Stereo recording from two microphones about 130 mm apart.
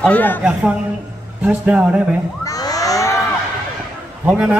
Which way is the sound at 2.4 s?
30° left (ahead or behind).